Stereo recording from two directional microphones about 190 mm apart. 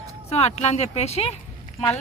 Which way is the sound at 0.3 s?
35° left (ahead or behind).